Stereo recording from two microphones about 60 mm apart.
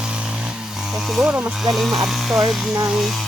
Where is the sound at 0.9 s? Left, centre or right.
Centre.